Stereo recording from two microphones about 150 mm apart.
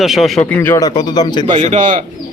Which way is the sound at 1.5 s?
45° right (ahead or behind).